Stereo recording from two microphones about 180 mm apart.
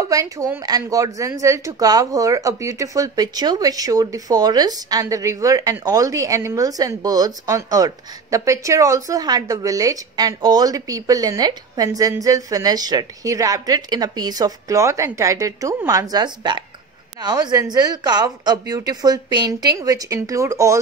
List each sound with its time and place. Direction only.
0.0 s a woman's voice: 20° right (ahead or behind)